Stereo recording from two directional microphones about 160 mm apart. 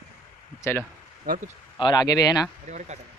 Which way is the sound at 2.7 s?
45° right (ahead or behind).